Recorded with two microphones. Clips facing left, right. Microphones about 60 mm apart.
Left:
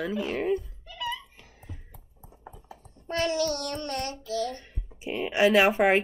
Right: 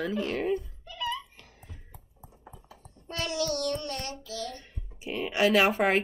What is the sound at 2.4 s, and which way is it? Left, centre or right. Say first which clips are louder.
Child singing: left 5 dB; left.